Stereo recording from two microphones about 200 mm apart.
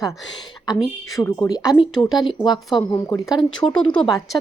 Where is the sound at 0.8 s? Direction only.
Centre (ahead or behind).